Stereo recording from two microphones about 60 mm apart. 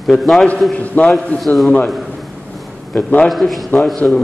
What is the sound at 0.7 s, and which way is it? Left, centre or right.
Speech, left.